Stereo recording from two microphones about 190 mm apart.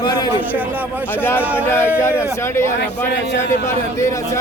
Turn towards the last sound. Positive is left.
turn(degrees=15)  # may be behind; listen again after turning